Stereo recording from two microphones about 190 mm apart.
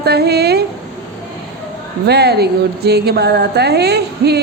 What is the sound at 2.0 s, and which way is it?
Speech, 60° right (ahead or behind).